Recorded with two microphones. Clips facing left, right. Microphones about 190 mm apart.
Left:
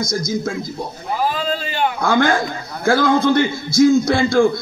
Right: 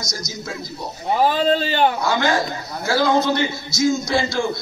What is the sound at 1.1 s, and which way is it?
Speech, 30° right (ahead or behind).